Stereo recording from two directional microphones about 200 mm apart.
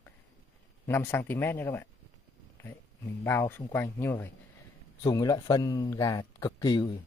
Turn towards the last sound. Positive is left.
turn(degrees=20)  # may be behind; listen again after turning